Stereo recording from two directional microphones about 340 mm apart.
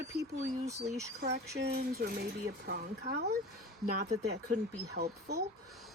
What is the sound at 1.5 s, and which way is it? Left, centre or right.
A woman's voice, right.